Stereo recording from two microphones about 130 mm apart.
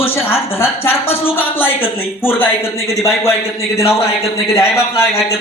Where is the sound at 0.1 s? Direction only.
20° left (ahead or behind).